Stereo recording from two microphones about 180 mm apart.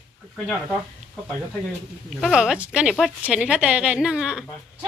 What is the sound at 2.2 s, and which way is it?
A woman's voice, 5° right (ahead or behind).